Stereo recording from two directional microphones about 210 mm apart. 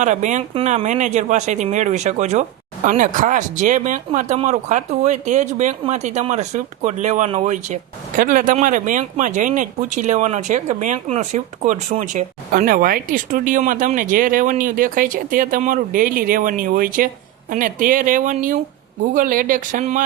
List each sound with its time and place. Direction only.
0.0 s speech: 35° right (ahead or behind)